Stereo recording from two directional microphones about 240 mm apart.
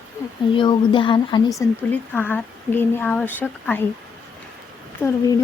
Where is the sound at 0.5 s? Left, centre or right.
Centre.